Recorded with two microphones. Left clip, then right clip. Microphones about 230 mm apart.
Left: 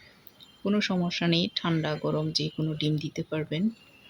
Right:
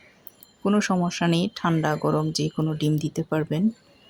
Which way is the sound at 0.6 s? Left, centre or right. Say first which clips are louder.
Right 5 dB; centre.